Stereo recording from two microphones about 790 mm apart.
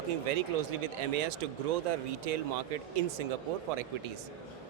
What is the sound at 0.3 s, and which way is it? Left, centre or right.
Speech, right.